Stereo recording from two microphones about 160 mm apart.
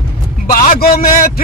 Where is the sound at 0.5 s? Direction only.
65° left (ahead or behind).